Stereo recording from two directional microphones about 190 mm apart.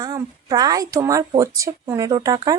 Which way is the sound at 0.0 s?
20° right (ahead or behind).